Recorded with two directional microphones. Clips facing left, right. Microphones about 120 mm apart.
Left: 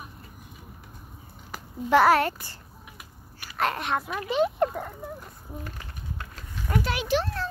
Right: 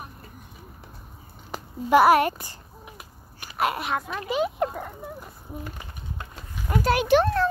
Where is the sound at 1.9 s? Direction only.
15° right (ahead or behind).